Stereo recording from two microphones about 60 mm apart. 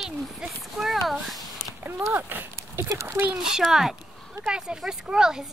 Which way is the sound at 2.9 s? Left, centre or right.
Right.